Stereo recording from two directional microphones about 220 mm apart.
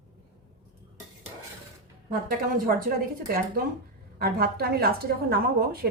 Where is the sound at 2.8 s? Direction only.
40° right (ahead or behind).